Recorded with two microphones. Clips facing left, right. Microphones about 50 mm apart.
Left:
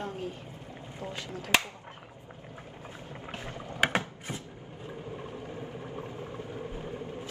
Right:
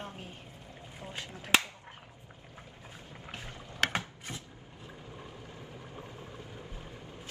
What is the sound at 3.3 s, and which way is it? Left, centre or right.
Boat, left.